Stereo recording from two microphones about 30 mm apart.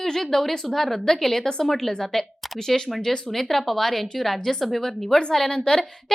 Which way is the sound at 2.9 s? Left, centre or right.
Centre.